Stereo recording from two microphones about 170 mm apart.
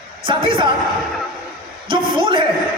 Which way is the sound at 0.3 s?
30° right (ahead or behind).